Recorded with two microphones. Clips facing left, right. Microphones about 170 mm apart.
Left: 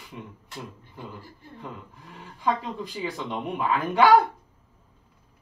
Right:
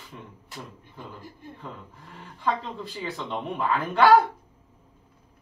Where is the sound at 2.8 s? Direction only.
10° left (ahead or behind).